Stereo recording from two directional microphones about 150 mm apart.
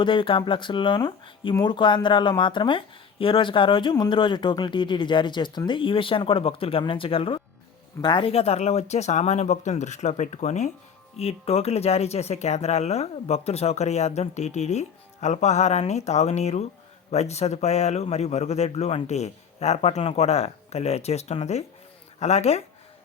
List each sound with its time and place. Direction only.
0.0 s speech: 35° left (ahead or behind)